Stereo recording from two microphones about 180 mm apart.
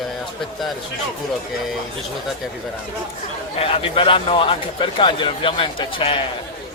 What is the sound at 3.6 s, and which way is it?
A man's voice, 30° left (ahead or behind).